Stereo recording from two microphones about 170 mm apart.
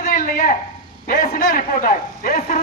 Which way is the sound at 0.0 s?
50° left (ahead or behind).